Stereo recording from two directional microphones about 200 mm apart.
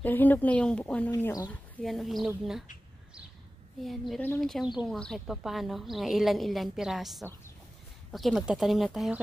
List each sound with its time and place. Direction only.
0.0 s a woman's voice: 10° left (ahead or behind)
1.8 s a woman's voice: centre (ahead or behind)
3.8 s a woman's voice: centre (ahead or behind)